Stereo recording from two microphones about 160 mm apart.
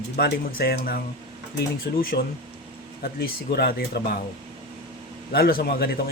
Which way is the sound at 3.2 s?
80° left.